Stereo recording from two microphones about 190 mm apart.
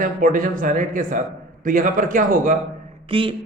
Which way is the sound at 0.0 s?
45° right (ahead or behind).